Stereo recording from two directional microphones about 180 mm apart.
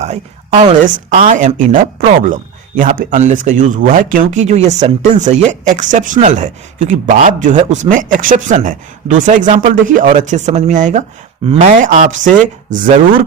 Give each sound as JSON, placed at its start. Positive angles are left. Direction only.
{"t": 0.0, "sound": "a woman's voice", "side_deg": -40}
{"t": 11.4, "sound": "speech", "side_deg": -30}
{"t": 11.7, "sound": "speech", "side_deg": -45}